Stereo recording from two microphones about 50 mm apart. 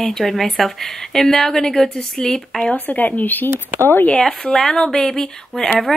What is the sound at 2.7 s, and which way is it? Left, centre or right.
Speech, left.